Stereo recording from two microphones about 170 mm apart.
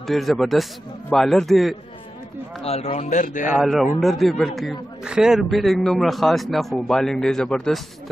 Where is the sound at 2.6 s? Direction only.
40° left (ahead or behind).